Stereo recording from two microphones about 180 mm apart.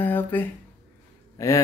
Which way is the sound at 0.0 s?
10° left (ahead or behind).